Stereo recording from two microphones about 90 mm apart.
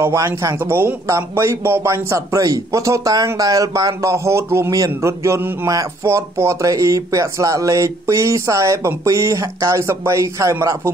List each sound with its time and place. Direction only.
0.0 s speech: 30° right (ahead or behind)